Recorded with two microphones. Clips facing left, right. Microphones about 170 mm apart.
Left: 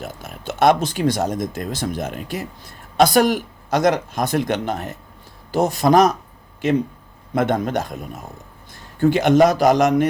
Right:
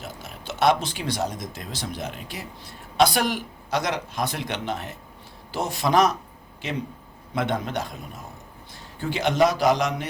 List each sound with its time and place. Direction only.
0.0 s speech: 50° left (ahead or behind)
9.0 s speech: 50° left (ahead or behind)